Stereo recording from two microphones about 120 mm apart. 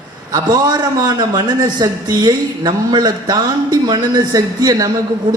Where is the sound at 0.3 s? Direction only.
35° right (ahead or behind).